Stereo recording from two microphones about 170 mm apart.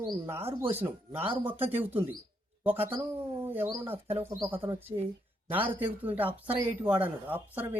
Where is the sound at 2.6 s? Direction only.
10° right (ahead or behind).